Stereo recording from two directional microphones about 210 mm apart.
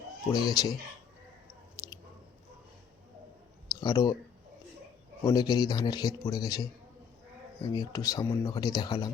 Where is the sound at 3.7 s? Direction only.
20° left (ahead or behind).